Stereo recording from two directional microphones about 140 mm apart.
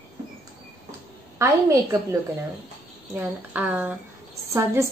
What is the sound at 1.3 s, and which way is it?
Speech, 20° right (ahead or behind).